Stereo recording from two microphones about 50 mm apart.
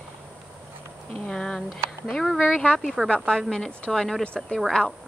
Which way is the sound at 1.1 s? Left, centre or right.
Centre.